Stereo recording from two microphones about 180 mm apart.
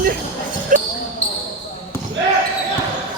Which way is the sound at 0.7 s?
45° right (ahead or behind).